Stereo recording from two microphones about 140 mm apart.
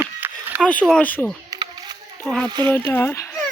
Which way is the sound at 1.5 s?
30° right (ahead or behind).